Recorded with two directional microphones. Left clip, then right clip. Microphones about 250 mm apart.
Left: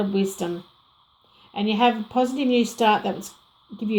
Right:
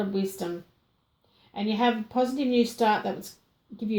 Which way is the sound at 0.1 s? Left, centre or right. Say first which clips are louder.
Left 5 dB; left.